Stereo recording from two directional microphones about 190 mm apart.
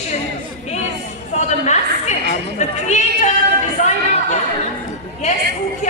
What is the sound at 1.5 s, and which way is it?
Speech, 40° left (ahead or behind).